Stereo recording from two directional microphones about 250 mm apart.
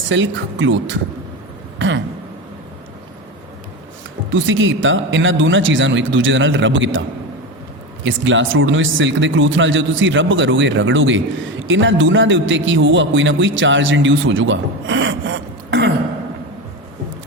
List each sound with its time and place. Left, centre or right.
0.1 s a man's voice: right
1.8 s a sound: right
4.3 s a man's voice: right
8.0 s a man's voice: right